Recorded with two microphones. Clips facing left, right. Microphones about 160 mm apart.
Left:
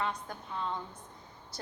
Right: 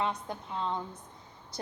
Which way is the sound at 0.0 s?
25° right (ahead or behind).